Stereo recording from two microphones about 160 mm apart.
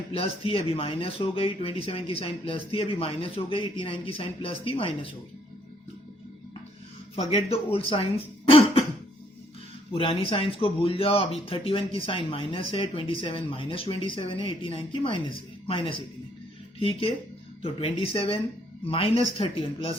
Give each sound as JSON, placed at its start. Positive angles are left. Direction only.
{"t": 0.1, "sound": "speech", "side_deg": 35}
{"t": 7.2, "sound": "speech", "side_deg": 40}
{"t": 9.9, "sound": "speech", "side_deg": 35}